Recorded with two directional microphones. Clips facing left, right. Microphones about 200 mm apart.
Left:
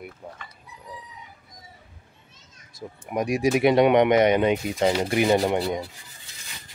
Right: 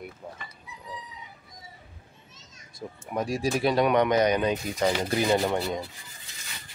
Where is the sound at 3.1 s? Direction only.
20° left (ahead or behind).